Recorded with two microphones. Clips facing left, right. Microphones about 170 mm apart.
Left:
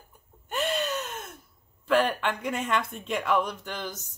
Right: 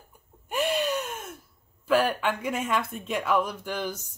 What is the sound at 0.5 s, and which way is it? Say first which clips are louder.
Gasp: right 2 dB; 10° right (ahead or behind).